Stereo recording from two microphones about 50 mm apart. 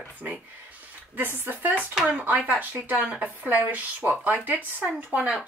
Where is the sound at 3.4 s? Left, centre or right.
Right.